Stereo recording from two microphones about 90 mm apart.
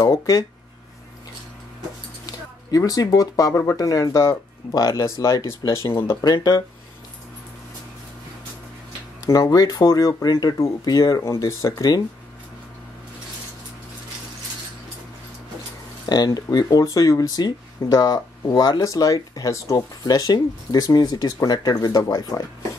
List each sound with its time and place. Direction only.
0.0 s speech: 35° left (ahead or behind)
2.2 s speech: 40° left (ahead or behind)
6.2 s speech: 45° left (ahead or behind)
9.2 s speech: 40° left (ahead or behind)
16.1 s speech: 45° left (ahead or behind)